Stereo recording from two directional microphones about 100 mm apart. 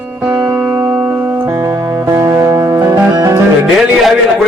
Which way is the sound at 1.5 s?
35° right (ahead or behind).